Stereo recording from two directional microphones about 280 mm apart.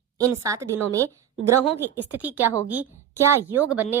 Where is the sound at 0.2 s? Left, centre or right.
Centre.